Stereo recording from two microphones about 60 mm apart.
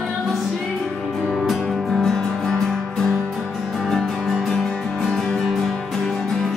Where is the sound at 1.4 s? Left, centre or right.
Centre.